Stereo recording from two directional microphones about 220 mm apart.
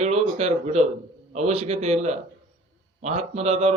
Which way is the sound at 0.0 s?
30° right (ahead or behind).